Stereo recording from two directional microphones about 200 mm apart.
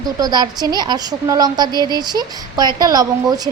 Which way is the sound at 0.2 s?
20° right (ahead or behind).